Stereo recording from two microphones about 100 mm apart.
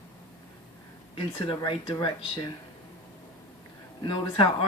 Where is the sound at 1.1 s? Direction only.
65° left (ahead or behind).